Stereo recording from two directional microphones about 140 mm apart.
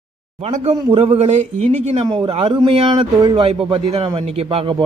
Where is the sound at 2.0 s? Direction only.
35° right (ahead or behind).